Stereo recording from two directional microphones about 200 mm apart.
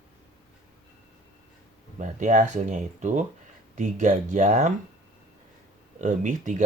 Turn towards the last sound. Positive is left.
turn(degrees=-40)  # may be behind; listen again after turning